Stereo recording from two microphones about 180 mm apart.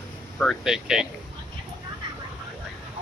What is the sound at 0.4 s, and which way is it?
Speech, centre (ahead or behind).